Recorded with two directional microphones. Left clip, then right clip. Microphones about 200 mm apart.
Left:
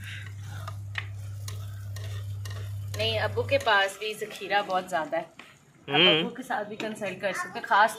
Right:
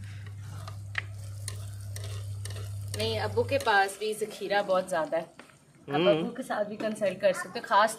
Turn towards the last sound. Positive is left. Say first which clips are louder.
# left 2 dB
turn(degrees=-30)  # may be behind; listen again after turning